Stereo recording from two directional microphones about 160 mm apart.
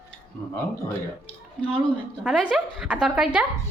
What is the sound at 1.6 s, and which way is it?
A woman's voice, 5° left (ahead or behind).